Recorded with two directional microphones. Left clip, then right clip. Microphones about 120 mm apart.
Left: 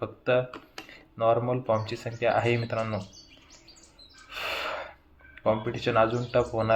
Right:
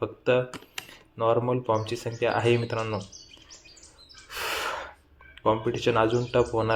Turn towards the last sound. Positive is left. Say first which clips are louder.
# right 2 dB
turn(degrees=-35)  # may be behind; listen again after turning